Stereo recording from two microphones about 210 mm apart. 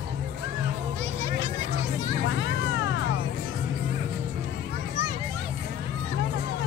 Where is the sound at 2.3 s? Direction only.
60° left (ahead or behind).